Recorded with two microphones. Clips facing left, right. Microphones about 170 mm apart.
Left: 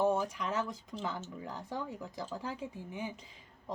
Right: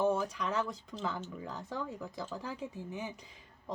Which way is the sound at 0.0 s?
15° left (ahead or behind).